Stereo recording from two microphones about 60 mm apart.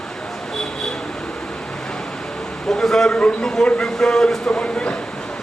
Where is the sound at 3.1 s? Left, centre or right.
Centre.